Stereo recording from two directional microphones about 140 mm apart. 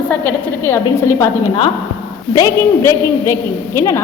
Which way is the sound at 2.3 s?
25° left (ahead or behind).